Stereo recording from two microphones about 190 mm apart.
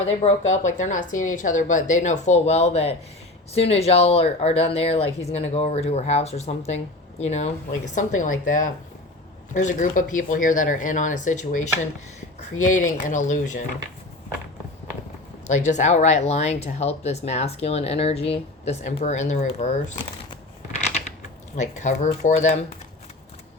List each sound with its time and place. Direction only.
0.0 s a woman's voice: 35° left (ahead or behind)
15.4 s speech: 40° left (ahead or behind)
21.2 s speech: 40° left (ahead or behind)